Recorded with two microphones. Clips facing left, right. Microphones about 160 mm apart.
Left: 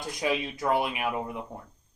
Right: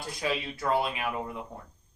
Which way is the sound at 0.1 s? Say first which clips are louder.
Left 3 dB; 20° left (ahead or behind).